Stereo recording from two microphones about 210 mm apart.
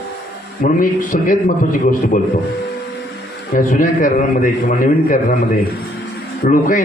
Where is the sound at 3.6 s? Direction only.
40° left (ahead or behind).